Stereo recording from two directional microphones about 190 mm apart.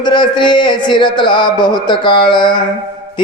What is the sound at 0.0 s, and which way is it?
Speech, 25° left (ahead or behind).